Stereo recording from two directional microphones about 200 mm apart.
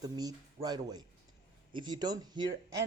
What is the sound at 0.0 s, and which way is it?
A woman's voice, 20° right (ahead or behind).